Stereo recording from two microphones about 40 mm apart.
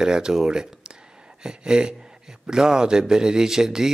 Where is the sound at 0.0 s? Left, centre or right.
Centre.